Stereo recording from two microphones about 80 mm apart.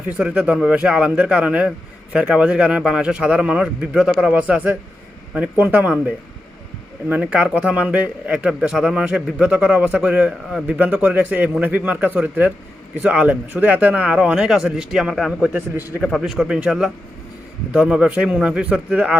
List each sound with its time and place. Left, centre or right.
0.2 s a man's voice: centre
7.1 s a man's voice: centre
15.4 s a man's voice: right
16.0 s speech: centre
16.2 s a man's voice: centre